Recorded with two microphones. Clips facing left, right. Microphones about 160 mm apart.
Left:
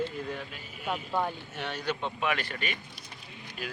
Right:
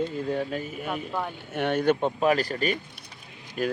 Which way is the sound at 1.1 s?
5° left (ahead or behind).